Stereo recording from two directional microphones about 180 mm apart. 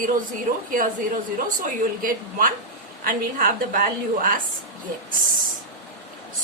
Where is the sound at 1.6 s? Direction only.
50° right (ahead or behind).